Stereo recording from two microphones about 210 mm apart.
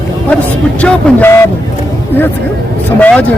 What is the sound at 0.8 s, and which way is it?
Speech, 10° left (ahead or behind).